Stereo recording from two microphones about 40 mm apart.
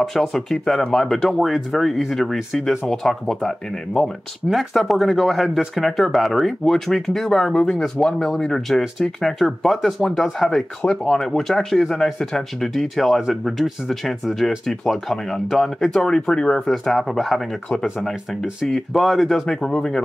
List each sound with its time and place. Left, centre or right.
0.0 s speech: centre
4.5 s speech: centre
16.3 s speech: left
16.6 s speech: centre
18.7 s speech: centre